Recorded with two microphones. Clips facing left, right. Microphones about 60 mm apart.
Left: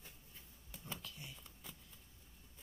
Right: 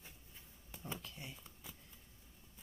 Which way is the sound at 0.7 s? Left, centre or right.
Centre.